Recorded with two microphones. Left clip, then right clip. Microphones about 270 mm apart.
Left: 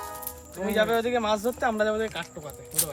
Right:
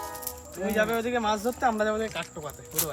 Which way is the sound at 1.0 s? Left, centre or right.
Left.